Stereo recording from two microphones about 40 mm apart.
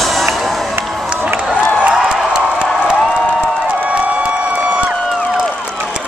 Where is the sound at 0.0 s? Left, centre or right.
Centre.